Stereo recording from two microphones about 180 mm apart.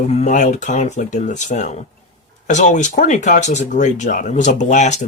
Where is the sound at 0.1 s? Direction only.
40° left (ahead or behind).